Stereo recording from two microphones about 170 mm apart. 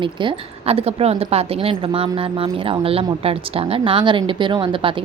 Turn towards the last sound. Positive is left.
turn(degrees=-30)  # may be behind; listen again after turning